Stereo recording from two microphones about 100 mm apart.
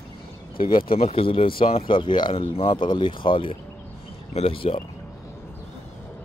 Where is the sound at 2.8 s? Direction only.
50° left (ahead or behind).